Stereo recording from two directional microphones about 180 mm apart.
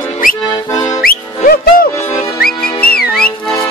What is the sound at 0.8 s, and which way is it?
Music, 55° left (ahead or behind).